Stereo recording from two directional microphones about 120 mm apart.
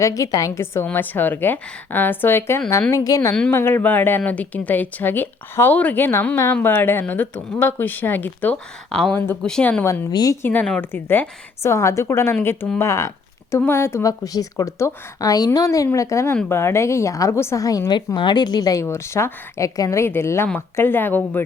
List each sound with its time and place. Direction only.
0.0 s a woman's voice: 30° left (ahead or behind)
3.5 s speech: 20° left (ahead or behind)
9.1 s a woman's voice: 20° left (ahead or behind)
9.4 s speech: 5° left (ahead or behind)
9.8 s a woman's voice: 25° left (ahead or behind)
10.1 s a woman's voice: 35° left (ahead or behind)
10.4 s a woman's voice: 15° left (ahead or behind)